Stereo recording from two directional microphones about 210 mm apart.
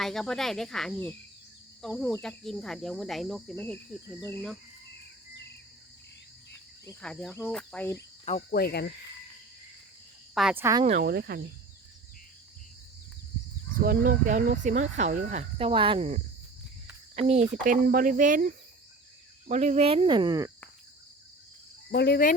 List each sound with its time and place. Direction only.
0.0 s speech: centre (ahead or behind)
7.0 s speech: 5° left (ahead or behind)
8.2 s cricket: 30° left (ahead or behind)
8.5 s cricket: 50° left (ahead or behind)
10.3 s speech: 5° right (ahead or behind)
11.0 s cricket: 50° right (ahead or behind)
13.7 s speech: 40° right (ahead or behind)
17.5 s speech: 40° right (ahead or behind); by 20.5 s 20° right (ahead or behind)
21.9 s cricket: 50° left (ahead or behind)